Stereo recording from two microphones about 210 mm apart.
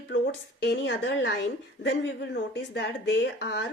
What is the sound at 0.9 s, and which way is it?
Speech, 55° left (ahead or behind).